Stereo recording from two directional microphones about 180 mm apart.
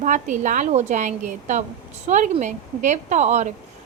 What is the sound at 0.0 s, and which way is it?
A woman's voice, 45° right (ahead or behind).